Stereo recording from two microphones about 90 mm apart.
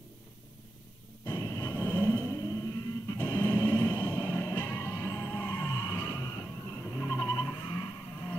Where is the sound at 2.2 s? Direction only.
35° left (ahead or behind).